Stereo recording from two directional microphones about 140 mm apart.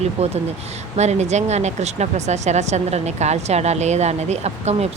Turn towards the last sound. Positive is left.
turn(degrees=-50)  # may be behind; listen again after turning